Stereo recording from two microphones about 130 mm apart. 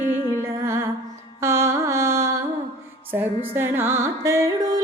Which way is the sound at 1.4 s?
20° right (ahead or behind).